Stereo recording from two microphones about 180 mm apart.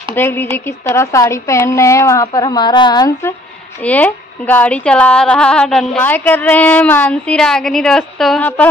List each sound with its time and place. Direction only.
0.1 s speech: 15° left (ahead or behind)
3.8 s speech: 10° left (ahead or behind)